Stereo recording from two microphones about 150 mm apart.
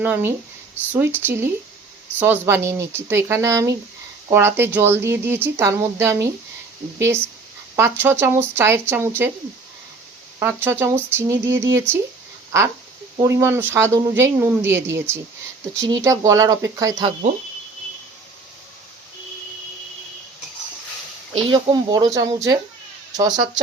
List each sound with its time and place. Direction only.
0.0 s speech: 15° right (ahead or behind)
10.4 s speech: 15° right (ahead or behind)
21.3 s speech: 30° right (ahead or behind)